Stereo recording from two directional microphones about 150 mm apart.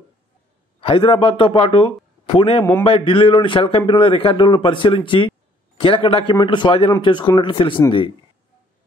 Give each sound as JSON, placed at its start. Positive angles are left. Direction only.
{"t": 0.7, "sound": "a man's voice", "side_deg": 35}